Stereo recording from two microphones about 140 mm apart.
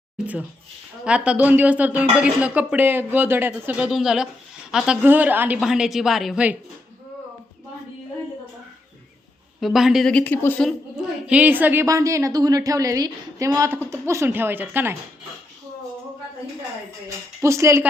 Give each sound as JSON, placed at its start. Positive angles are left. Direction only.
{"t": 1.0, "sound": "speech", "side_deg": -10}
{"t": 5.5, "sound": "a woman's voice", "side_deg": -5}
{"t": 9.6, "sound": "a woman's voice", "side_deg": 0}
{"t": 10.1, "sound": "speech", "side_deg": 10}
{"t": 11.3, "sound": "a woman's voice", "side_deg": -10}
{"t": 17.4, "sound": "a woman's voice", "side_deg": -20}